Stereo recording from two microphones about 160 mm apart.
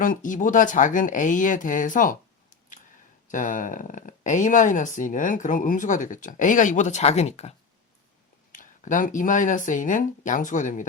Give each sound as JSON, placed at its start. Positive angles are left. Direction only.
{"t": 0.0, "sound": "speech", "side_deg": 55}
{"t": 8.5, "sound": "speech", "side_deg": 50}